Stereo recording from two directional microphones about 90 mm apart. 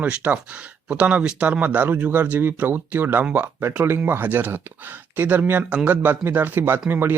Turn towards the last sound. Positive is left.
turn(degrees=-25)  # may be behind; listen again after turning